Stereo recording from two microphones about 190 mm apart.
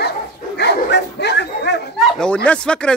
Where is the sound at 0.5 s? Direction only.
60° left (ahead or behind).